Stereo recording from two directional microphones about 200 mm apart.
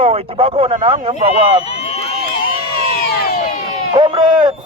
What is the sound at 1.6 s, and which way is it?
Run, 35° left (ahead or behind).